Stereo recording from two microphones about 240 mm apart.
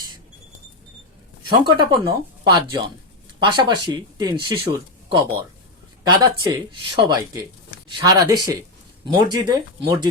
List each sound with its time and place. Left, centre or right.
1.6 s speech: centre